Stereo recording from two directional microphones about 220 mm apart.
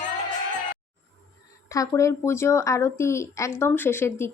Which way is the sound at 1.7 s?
15° left (ahead or behind).